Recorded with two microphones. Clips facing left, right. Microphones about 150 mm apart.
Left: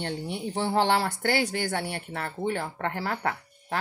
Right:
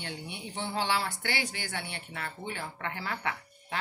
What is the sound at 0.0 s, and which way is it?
Speech, 50° left (ahead or behind).